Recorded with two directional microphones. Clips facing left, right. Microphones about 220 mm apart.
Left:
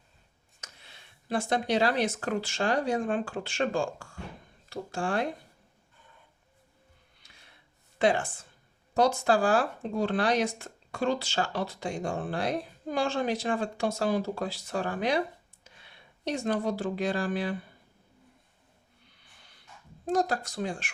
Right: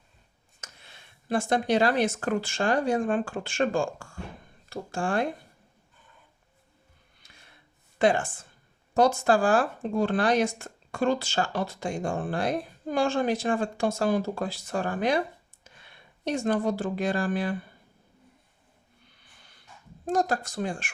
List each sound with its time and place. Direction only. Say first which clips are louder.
0.6 s speech: right 2 dB; 50° right (ahead or behind)
7.9 s speech: right 2 dB; 50° right (ahead or behind)
20.1 s speech: right 1 dB; 50° right (ahead or behind)